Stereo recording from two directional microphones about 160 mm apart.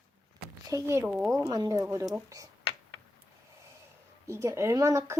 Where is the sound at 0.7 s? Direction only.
20° right (ahead or behind).